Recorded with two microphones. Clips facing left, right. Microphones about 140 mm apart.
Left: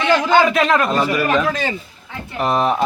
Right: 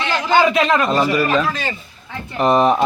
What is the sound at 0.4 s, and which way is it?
Speech, centre (ahead or behind).